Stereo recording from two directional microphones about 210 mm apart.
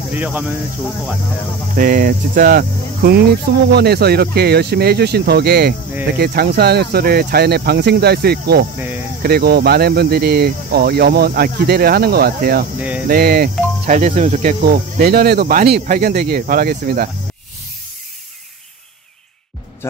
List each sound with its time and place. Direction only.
0.1 s speech: 10° right (ahead or behind)
1.8 s speech: 40° right (ahead or behind)
8.7 s cricket: 10° right (ahead or behind)
9.2 s speech: 50° right (ahead or behind)
19.8 s speech: 10° left (ahead or behind)